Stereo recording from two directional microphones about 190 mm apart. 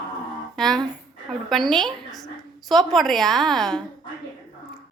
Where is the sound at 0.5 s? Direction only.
Centre (ahead or behind).